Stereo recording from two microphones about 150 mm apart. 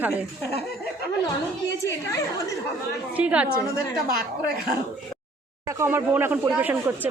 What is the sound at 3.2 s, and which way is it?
Speech, 10° right (ahead or behind).